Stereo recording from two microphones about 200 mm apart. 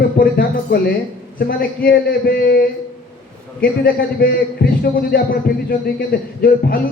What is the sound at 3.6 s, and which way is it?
A man's voice, 50° left (ahead or behind).